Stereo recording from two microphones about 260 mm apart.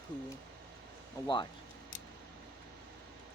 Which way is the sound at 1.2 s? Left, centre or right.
Centre.